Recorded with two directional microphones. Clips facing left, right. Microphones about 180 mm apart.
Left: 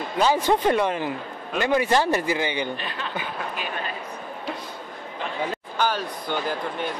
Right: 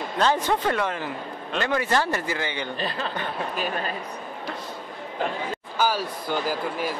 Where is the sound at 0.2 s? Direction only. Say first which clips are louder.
Left 3 dB; 10° left (ahead or behind).